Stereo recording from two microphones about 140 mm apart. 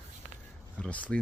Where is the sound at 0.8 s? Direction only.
10° left (ahead or behind).